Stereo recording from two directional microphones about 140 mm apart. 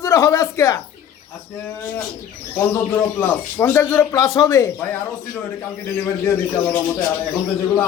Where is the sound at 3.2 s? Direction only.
15° left (ahead or behind).